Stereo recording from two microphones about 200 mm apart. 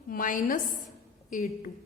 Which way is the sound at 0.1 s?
45° left (ahead or behind).